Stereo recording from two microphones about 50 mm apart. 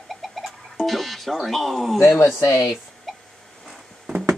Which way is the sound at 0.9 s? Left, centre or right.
Centre.